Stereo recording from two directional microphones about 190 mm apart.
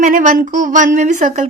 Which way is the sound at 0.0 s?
45° right (ahead or behind).